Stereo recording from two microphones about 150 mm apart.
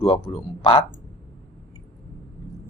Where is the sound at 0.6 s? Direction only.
30° left (ahead or behind).